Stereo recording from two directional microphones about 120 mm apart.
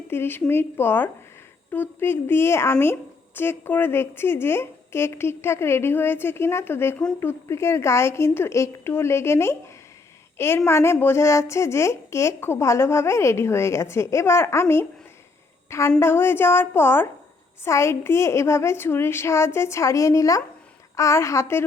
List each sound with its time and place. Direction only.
0.1 s a woman's voice: 20° left (ahead or behind)
16.0 s a woman's voice: 20° left (ahead or behind)